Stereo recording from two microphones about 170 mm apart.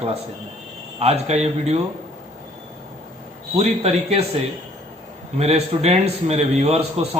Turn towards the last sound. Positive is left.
turn(degrees=-35)  # may be behind; listen again after turning